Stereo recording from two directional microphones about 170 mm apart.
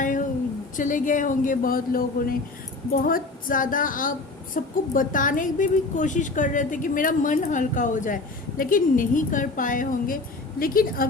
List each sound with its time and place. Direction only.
0.8 s a woman's voice: 50° left (ahead or behind)